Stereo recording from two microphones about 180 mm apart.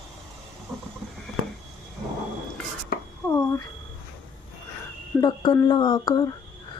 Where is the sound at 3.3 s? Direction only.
15° left (ahead or behind).